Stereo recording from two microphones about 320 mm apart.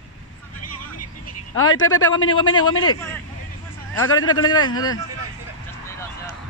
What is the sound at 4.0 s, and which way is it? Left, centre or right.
Speech, left.